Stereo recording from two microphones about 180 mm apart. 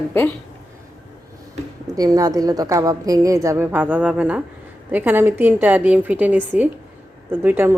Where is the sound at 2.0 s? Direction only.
20° right (ahead or behind).